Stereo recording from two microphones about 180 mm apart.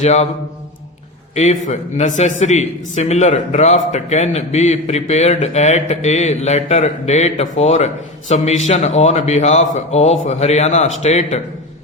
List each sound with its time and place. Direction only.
0.0 s a man's voice: 40° left (ahead or behind)
1.4 s a man's voice: 40° left (ahead or behind)